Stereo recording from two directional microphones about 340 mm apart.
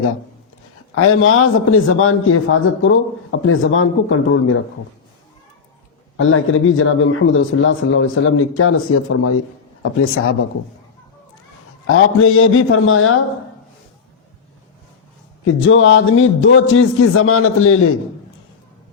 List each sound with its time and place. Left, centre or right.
0.9 s speech: left
6.1 s speech: left
11.9 s speech: left
15.4 s speech: left